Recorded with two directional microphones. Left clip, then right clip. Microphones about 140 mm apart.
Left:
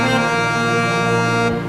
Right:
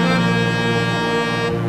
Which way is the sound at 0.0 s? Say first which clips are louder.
Left 2 dB; centre (ahead or behind).